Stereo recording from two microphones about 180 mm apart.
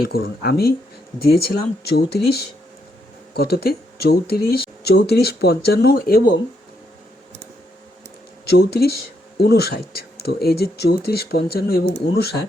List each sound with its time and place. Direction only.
0.1 s speech: 60° left (ahead or behind)
8.4 s speech: 60° left (ahead or behind)